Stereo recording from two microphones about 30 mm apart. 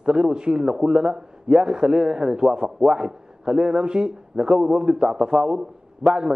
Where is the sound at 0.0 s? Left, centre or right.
Right.